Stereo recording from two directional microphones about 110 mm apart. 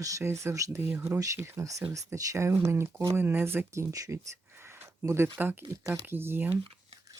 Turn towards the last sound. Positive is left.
turn(degrees=-20)  # may be behind; listen again after turning